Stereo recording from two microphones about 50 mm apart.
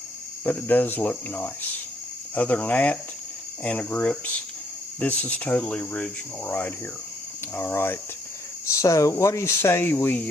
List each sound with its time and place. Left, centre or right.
0.4 s speech: left
7.5 s speech: left
8.6 s speech: left
9.8 s speech: left